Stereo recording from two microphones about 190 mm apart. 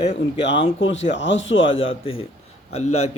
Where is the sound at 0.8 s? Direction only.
80° left.